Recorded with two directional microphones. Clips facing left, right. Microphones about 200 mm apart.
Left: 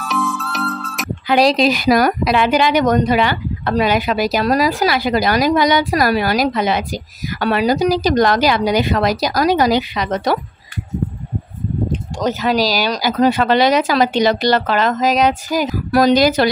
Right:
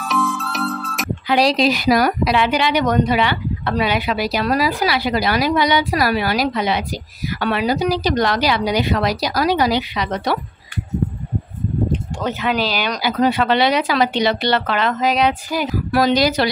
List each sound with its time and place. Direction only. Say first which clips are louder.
0.0 s music: even; centre (ahead or behind)
1.3 s speech: left 3 dB; 50° left (ahead or behind)
12.3 s speech: left 4 dB; 40° left (ahead or behind)